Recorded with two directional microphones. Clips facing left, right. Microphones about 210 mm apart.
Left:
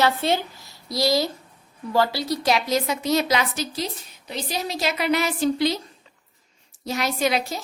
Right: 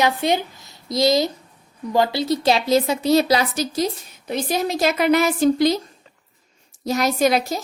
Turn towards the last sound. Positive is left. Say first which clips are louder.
# right 5 dB
turn(degrees=-45)  # may be behind; listen again after turning